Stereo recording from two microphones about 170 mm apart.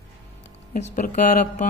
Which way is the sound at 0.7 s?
45° left (ahead or behind).